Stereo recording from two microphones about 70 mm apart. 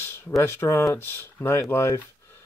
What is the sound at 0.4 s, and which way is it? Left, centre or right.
A man's voice, left.